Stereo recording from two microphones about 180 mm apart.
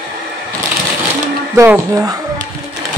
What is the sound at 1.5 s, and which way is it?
Speech, 15° right (ahead or behind).